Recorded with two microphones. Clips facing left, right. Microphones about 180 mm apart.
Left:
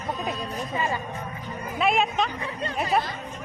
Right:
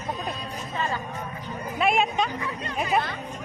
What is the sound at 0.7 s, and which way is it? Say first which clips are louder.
Speech: left 1 dB; 10° left (ahead or behind).